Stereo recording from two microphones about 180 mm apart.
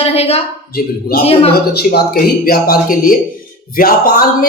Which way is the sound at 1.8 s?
60° left (ahead or behind).